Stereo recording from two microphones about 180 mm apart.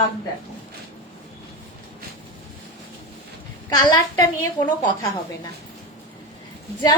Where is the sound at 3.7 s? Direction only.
20° left (ahead or behind).